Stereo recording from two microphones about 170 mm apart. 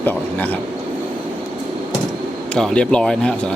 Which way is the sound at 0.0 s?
10° left (ahead or behind).